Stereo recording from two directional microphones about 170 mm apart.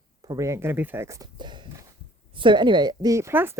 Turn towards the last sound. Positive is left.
turn(degrees=-15)  # may be behind; listen again after turning